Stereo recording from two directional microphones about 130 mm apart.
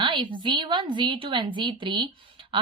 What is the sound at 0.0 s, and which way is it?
A woman's voice, 40° right (ahead or behind).